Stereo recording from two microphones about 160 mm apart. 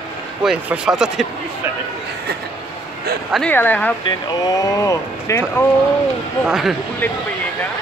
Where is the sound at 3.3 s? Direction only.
10° left (ahead or behind).